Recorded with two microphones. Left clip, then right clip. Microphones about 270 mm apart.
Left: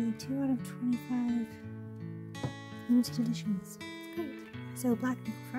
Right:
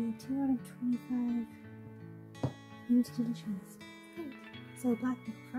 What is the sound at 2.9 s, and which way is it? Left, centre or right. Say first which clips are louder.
Speech: left 2 dB; left.